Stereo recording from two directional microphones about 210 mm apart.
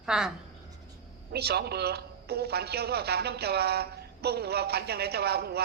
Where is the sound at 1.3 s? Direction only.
50° right (ahead or behind).